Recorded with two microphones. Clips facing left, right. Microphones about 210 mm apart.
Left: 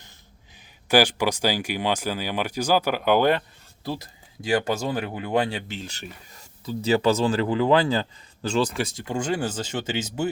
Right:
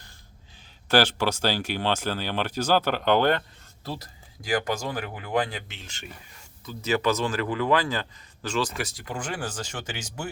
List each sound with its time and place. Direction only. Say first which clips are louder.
0.9 s speech: left 2 dB; 15° left (ahead or behind)
4.4 s speech: left 4 dB; 25° left (ahead or behind)